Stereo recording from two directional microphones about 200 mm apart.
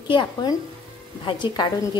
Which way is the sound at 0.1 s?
20° left (ahead or behind).